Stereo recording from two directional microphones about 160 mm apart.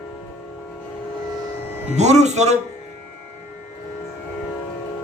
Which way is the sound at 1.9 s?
45° right (ahead or behind).